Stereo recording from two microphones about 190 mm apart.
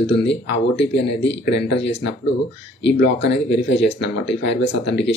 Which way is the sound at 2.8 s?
65° left (ahead or behind).